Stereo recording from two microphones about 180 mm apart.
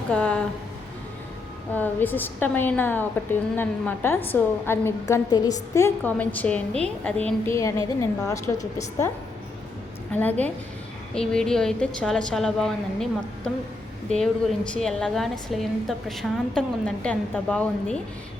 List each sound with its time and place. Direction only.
0.1 s a woman's voice: 5° left (ahead or behind)
1.7 s a woman's voice: 10° left (ahead or behind)
10.2 s a woman's voice: 10° left (ahead or behind)